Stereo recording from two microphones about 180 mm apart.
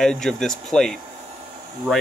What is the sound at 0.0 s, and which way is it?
Speech, 5° left (ahead or behind).